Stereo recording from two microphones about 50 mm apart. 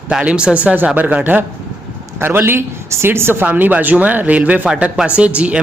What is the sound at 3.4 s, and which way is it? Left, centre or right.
A man's voice, right.